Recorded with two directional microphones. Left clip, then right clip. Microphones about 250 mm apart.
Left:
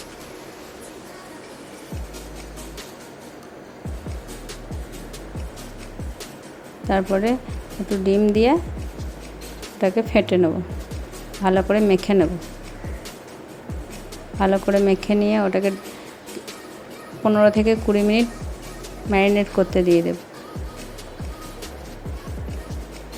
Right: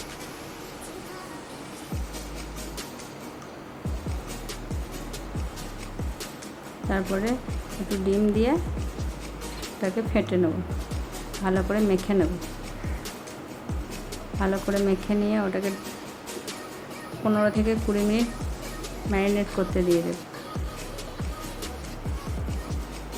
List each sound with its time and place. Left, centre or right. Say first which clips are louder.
6.8 s a woman's voice: left 7 dB; left
9.8 s a woman's voice: left 8 dB; left
14.3 s a woman's voice: left 8 dB; left
17.2 s a woman's voice: left 8 dB; left